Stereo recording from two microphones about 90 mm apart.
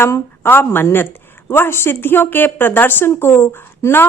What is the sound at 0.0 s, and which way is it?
A woman's voice, 25° left (ahead or behind).